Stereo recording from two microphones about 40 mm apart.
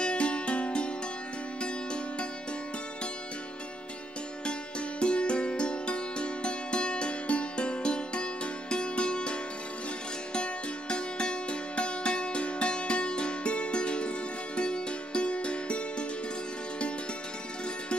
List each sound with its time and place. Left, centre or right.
0.0 s music: left
5.0 s music: left